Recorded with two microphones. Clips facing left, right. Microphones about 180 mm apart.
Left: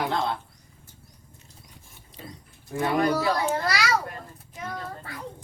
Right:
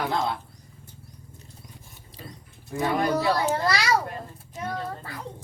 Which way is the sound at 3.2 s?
30° right (ahead or behind).